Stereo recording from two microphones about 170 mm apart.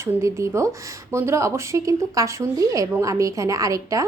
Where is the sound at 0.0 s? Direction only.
15° right (ahead or behind).